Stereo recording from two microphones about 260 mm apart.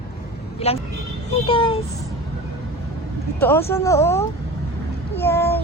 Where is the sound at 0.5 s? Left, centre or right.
Left.